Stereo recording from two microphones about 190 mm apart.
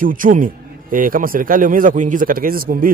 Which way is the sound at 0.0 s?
45° right (ahead or behind).